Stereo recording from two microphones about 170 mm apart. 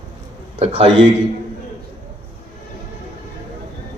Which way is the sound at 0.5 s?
35° right (ahead or behind).